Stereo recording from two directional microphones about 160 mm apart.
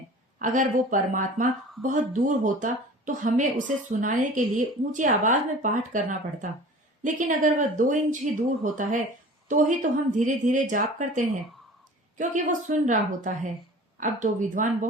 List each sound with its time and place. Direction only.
0.3 s speech: 55° right (ahead or behind)